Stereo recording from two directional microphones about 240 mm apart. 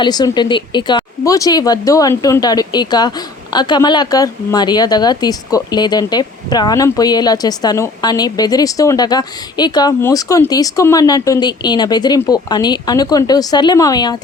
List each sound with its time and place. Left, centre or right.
0.0 s a woman's voice: centre